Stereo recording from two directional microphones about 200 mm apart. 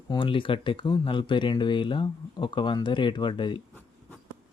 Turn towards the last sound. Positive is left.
turn(degrees=25)  # may be behind; listen again after turning